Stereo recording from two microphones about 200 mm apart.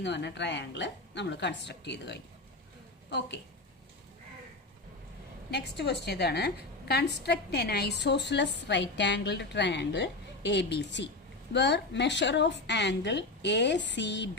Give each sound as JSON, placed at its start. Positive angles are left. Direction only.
{"t": 0.0, "sound": "a woman's voice", "side_deg": 60}
{"t": 5.5, "sound": "a woman's voice", "side_deg": 60}